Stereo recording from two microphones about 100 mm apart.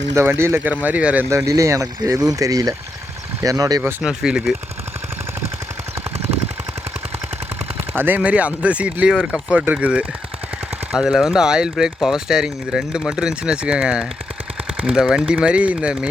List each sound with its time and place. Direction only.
0.1 s speech: 30° right (ahead or behind)
1.3 s speech: 30° right (ahead or behind)
4.0 s speech: 5° right (ahead or behind)
7.8 s speech: 20° right (ahead or behind)